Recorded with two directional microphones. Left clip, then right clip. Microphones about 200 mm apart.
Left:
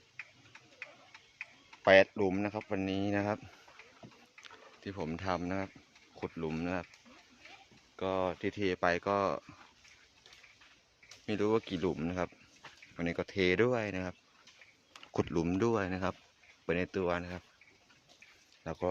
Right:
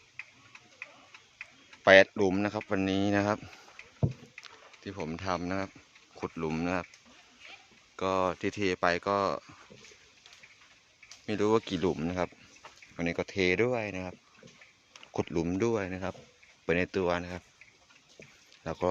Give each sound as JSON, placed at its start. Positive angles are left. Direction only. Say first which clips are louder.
{"t": 0.2, "sound": "tick-tock", "louder": "right 3 dB", "side_deg": -55}
{"t": 1.8, "sound": "speech", "louder": "right 4 dB", "side_deg": -20}
{"t": 4.4, "sound": "speech", "louder": "even", "side_deg": -5}
{"t": 7.9, "sound": "speech", "louder": "right 5 dB", "side_deg": -20}
{"t": 11.3, "sound": "speech", "louder": "right 4 dB", "side_deg": -15}
{"t": 16.6, "sound": "speech", "louder": "right 4 dB", "side_deg": -15}
{"t": 18.6, "sound": "speech", "louder": "right 5 dB", "side_deg": -25}